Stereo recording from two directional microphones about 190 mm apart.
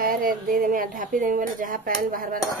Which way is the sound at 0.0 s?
50° right (ahead or behind).